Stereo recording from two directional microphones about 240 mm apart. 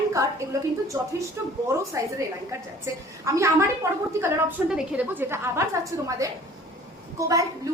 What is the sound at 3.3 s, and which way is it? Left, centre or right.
A woman's voice, centre.